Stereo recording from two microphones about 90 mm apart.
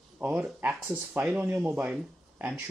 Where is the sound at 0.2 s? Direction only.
20° right (ahead or behind).